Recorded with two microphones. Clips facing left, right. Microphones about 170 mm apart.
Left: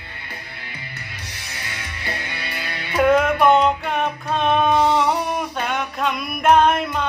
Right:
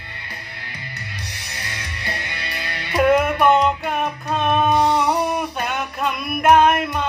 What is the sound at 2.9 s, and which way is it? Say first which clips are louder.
Speech: even; 10° right (ahead or behind).